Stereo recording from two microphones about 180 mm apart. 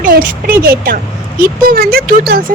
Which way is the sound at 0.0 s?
50° right (ahead or behind).